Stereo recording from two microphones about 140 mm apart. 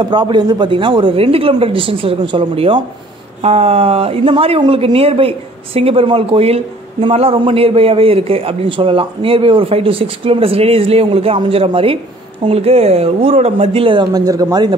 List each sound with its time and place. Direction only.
0.0 s a man's voice: 30° right (ahead or behind)